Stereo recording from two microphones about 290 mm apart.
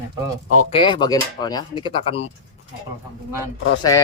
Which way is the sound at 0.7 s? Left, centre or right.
Centre.